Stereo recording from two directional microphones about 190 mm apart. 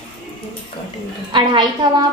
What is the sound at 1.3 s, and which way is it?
Speech, 25° right (ahead or behind).